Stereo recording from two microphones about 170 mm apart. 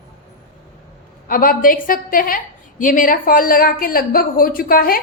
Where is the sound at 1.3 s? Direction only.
55° left (ahead or behind).